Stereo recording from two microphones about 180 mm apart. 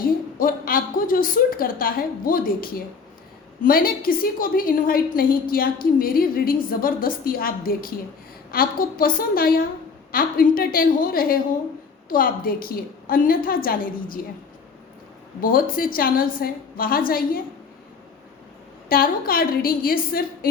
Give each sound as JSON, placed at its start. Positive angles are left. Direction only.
{"t": 0.3, "sound": "a woman's voice", "side_deg": 50}
{"t": 15.4, "sound": "a woman's voice", "side_deg": 50}
{"t": 18.9, "sound": "a woman's voice", "side_deg": 55}